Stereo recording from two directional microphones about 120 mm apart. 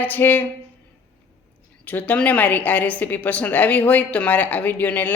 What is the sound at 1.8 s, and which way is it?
A woman's voice, 15° left (ahead or behind).